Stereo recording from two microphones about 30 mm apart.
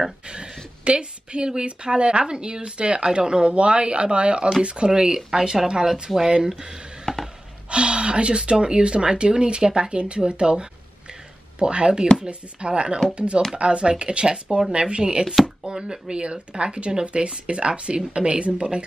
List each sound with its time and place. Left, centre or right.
0.8 s speech: right; by 6.3 s centre
6.3 s speech: right
7.1 s chopping: centre
7.7 s speech: right